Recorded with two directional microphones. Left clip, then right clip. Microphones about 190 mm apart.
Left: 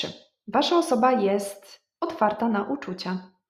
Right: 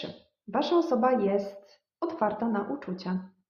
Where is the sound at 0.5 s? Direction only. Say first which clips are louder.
Left 4 dB; 35° left (ahead or behind).